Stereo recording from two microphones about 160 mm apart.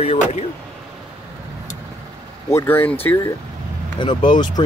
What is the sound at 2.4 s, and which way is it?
Speech, 15° left (ahead or behind).